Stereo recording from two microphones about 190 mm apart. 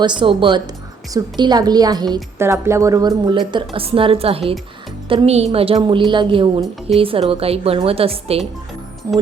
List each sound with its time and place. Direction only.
0.0 s a woman's voice: 25° right (ahead or behind)
9.1 s speech: 20° right (ahead or behind)